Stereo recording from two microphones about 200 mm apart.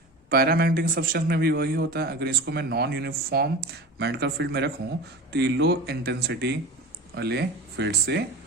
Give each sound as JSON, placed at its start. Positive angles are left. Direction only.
{"t": 0.3, "sound": "a man's voice", "side_deg": -50}